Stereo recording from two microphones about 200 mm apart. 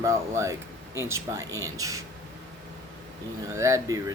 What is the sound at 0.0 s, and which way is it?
Speech, 15° right (ahead or behind).